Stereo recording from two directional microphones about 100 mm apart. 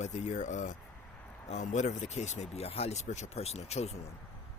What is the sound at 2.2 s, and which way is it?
Speech, 90° left.